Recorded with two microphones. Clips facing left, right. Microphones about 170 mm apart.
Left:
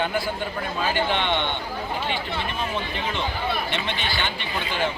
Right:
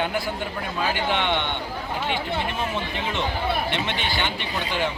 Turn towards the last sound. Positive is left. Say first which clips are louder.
# right 1 dB
turn(degrees=-15)  # may be behind; listen again after turning